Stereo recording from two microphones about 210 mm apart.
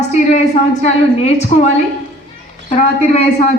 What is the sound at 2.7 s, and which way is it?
Speech, 35° left (ahead or behind).